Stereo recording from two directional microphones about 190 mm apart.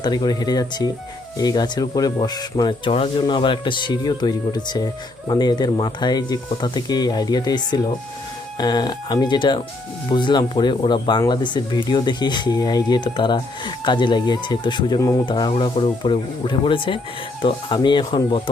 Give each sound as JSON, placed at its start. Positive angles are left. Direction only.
{"t": 0.0, "sound": "speech", "side_deg": 20}